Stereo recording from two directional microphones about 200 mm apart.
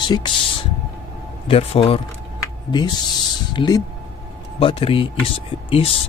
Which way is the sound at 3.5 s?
20° left (ahead or behind).